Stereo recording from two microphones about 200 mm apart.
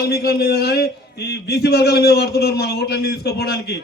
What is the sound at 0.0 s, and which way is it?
A man's voice, 50° left (ahead or behind).